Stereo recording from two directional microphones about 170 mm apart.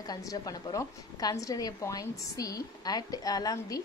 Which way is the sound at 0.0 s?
20° left (ahead or behind).